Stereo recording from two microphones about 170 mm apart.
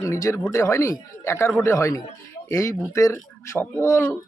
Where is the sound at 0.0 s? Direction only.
15° left (ahead or behind).